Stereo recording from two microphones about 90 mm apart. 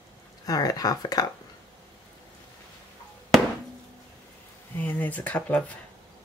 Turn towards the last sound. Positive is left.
turn(degrees=15)  # may be behind; listen again after turning